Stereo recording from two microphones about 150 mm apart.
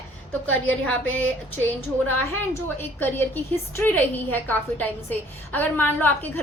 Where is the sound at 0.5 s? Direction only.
10° left (ahead or behind).